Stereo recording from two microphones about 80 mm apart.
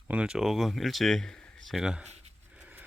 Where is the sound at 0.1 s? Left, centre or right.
Centre.